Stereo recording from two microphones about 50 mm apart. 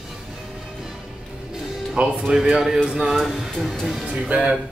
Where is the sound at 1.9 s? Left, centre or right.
Centre.